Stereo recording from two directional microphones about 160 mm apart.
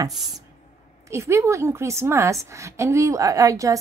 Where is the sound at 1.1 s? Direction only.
15° right (ahead or behind).